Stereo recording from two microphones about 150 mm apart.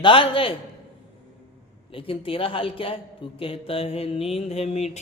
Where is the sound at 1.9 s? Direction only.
35° left (ahead or behind).